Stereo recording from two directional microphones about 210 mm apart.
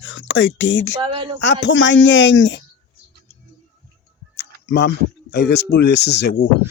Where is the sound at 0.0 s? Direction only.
65° left (ahead or behind).